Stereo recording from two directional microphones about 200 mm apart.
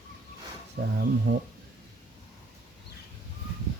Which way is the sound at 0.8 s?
60° right (ahead or behind).